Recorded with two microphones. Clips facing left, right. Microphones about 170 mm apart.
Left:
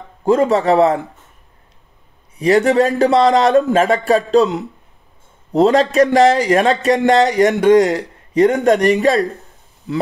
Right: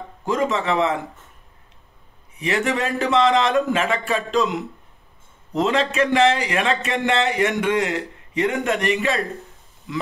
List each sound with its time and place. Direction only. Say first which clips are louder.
0.2 s a man's voice: left 8 dB; 35° left (ahead or behind)
2.3 s a man's voice: left 10 dB; 35° left (ahead or behind)